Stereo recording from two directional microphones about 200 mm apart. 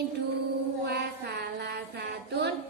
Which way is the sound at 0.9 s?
55° right (ahead or behind).